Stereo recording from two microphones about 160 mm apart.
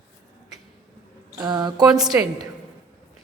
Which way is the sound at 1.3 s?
25° right (ahead or behind).